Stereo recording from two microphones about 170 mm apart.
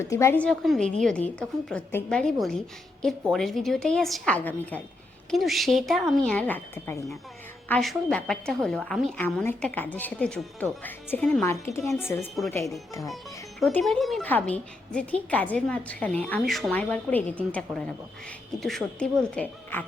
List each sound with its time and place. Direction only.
0.0 s a woman's voice: 15° left (ahead or behind)
13.6 s a woman's voice: centre (ahead or behind)